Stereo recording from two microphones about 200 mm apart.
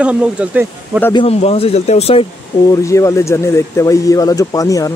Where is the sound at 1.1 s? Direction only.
25° left (ahead or behind).